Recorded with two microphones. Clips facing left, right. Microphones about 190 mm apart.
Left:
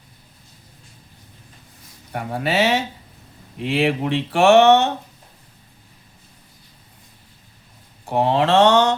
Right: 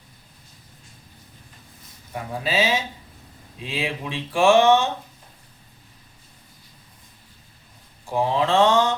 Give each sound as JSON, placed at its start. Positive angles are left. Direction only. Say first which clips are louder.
{"t": 2.1, "sound": "speech", "louder": "left 3 dB", "side_deg": 65}
{"t": 8.0, "sound": "speech", "louder": "left 4 dB", "side_deg": 65}